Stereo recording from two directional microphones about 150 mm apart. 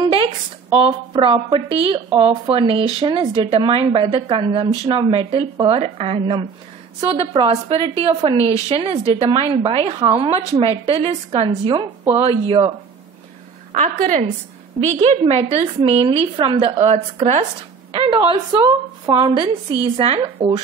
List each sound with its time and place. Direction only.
0.0 s a sound: 35° right (ahead or behind)
0.7 s speech: 35° right (ahead or behind)
13.7 s a woman's voice: 60° right (ahead or behind)
15.0 s a woman's voice: 45° right (ahead or behind)